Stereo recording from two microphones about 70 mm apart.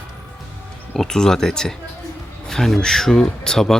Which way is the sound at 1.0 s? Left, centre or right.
Centre.